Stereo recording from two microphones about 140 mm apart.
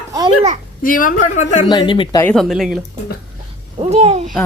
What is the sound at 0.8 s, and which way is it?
Speech, 80° left.